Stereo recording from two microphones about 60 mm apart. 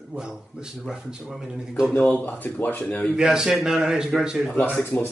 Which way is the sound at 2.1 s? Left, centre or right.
Left.